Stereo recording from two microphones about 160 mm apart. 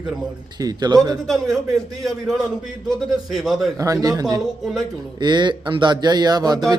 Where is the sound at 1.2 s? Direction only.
Centre (ahead or behind).